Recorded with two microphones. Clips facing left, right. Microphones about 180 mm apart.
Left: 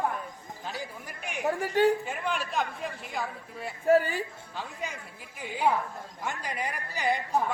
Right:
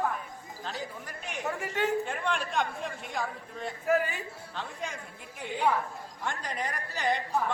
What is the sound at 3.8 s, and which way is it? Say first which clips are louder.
Speech: left 5 dB; 30° left (ahead or behind).